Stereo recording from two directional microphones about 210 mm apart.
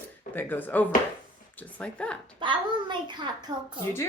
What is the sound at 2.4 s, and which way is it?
Speech, 20° right (ahead or behind).